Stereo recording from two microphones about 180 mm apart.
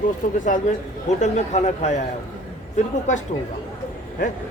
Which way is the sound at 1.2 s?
40° left (ahead or behind).